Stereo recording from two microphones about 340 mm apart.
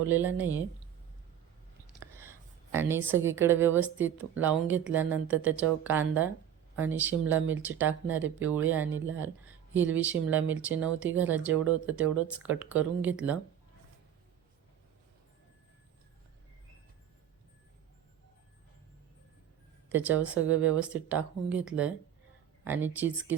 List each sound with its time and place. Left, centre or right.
0.1 s speech: centre
1.9 s a sound: centre
2.7 s speech: centre
19.9 s speech: centre